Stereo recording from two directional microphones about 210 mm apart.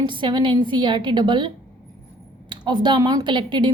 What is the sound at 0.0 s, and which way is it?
A woman's voice, 20° right (ahead or behind).